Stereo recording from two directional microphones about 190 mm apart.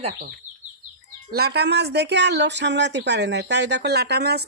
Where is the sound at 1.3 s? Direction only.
60° right (ahead or behind).